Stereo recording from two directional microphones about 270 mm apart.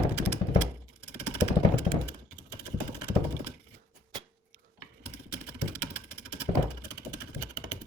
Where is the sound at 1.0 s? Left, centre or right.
Centre.